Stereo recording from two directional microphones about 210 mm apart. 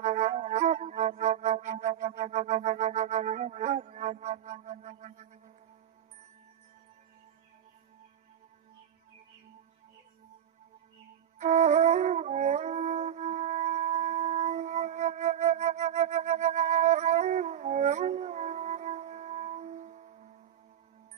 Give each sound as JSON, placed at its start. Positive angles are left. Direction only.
{"t": 0.0, "sound": "music", "side_deg": -35}
{"t": 11.3, "sound": "music", "side_deg": -35}